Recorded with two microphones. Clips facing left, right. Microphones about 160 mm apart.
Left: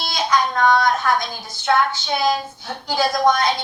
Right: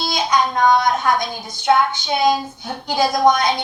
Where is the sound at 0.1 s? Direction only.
15° right (ahead or behind).